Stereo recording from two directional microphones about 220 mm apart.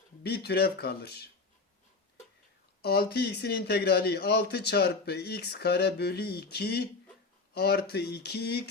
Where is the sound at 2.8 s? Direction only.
45° left (ahead or behind).